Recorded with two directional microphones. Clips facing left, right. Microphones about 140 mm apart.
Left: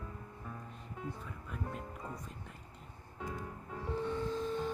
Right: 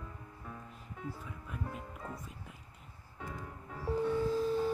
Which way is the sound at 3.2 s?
20° left (ahead or behind).